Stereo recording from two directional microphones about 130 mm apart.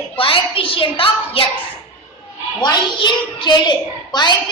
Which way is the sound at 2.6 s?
35° left (ahead or behind).